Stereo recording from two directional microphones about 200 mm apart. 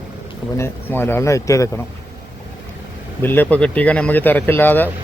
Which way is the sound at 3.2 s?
10° left (ahead or behind).